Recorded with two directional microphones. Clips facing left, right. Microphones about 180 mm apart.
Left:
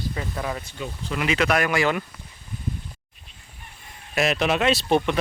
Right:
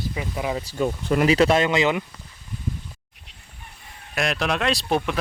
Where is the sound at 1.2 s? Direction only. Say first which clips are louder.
Right 4 dB; 35° right (ahead or behind).